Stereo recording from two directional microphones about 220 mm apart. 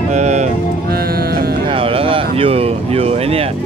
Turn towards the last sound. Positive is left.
turn(degrees=-25)  # may be behind; listen again after turning